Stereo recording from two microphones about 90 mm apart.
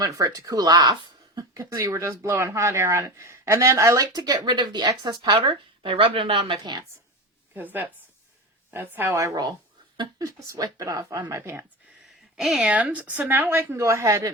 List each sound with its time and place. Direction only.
0.0 s speech: 40° right (ahead or behind)
1.8 s speech: 35° right (ahead or behind); by 5.3 s 50° right (ahead or behind)
5.3 s a woman's voice: 75° right (ahead or behind)
7.5 s speech: 20° right (ahead or behind)
12.0 s a woman's voice: 5° right (ahead or behind); by 14.3 s 35° right (ahead or behind)